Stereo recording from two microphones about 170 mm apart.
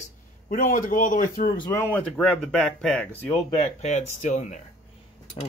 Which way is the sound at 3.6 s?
40° left (ahead or behind).